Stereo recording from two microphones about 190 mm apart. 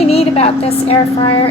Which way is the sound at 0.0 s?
30° left (ahead or behind).